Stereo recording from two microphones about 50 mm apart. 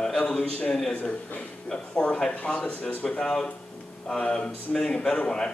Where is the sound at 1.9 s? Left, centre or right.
Left.